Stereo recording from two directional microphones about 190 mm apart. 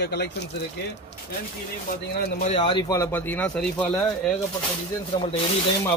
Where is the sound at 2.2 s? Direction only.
50° left (ahead or behind).